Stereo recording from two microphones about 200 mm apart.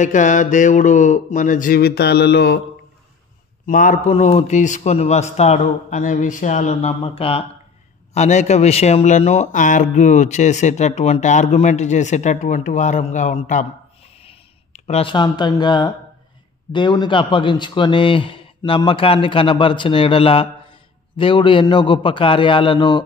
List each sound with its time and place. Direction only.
0.0 s a man's voice: 40° left (ahead or behind); by 2.6 s 55° left (ahead or behind)
3.6 s a man's voice: 40° left (ahead or behind); by 23.0 s 25° left (ahead or behind)